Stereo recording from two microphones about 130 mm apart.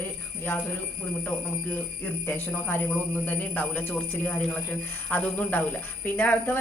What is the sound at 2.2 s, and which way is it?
Speech, 15° left (ahead or behind).